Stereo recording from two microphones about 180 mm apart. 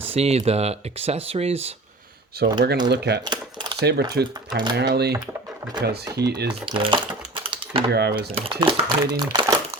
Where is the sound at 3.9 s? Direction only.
65° right (ahead or behind).